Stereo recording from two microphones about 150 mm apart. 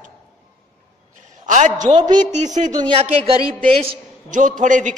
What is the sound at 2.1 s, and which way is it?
Speech, 55° right (ahead or behind).